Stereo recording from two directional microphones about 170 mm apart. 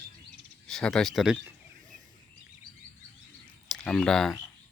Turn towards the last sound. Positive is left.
turn(degrees=5)  # may be behind; listen again after turning